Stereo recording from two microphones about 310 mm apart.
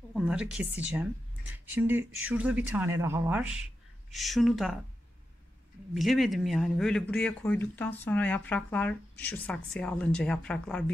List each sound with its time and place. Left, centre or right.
0.1 s speech: centre
5.9 s speech: centre